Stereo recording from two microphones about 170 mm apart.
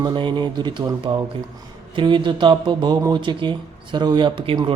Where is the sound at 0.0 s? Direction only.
30° right (ahead or behind).